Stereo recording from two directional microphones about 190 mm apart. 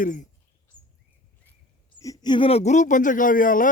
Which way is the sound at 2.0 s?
20° left (ahead or behind).